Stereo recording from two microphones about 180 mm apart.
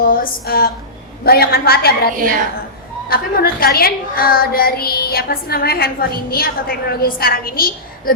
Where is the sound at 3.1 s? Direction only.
55° left (ahead or behind).